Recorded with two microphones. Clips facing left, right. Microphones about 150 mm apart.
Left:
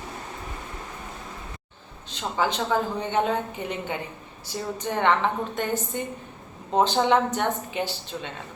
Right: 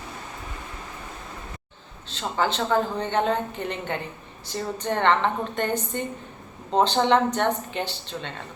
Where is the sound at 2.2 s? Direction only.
10° left (ahead or behind).